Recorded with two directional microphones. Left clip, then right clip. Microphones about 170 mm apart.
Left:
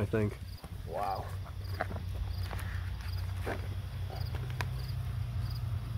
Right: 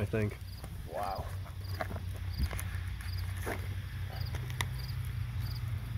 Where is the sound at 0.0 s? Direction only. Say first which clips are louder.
Left 2 dB; 10° left (ahead or behind).